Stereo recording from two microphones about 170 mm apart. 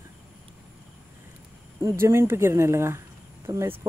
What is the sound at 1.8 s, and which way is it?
Speech, 15° right (ahead or behind).